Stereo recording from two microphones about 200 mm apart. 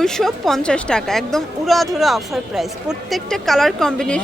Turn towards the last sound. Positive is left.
turn(degrees=5)  # may be behind; listen again after turning